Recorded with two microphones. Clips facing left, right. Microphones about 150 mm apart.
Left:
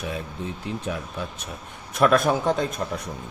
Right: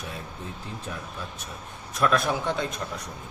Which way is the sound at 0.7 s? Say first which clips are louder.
Left 8 dB; 85° left.